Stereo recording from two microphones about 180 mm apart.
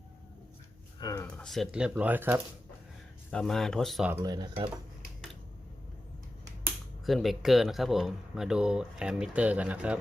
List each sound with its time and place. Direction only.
0.9 s a sound: 20° left (ahead or behind)
1.4 s speech: centre (ahead or behind)
3.2 s speech: 5° left (ahead or behind)
4.1 s speech: 20° right (ahead or behind)
7.0 s speech: centre (ahead or behind)